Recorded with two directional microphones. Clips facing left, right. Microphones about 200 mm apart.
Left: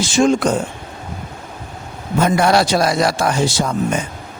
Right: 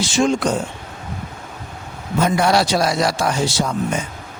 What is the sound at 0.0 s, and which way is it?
Speech, 50° left (ahead or behind).